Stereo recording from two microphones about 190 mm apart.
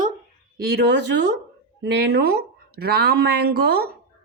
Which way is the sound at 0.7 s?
60° right (ahead or behind).